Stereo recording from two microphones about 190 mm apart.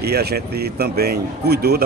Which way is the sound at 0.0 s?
55° right (ahead or behind).